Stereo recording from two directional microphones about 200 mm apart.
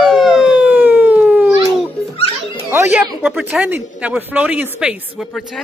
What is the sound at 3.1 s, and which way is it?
A woman's voice, 5° right (ahead or behind).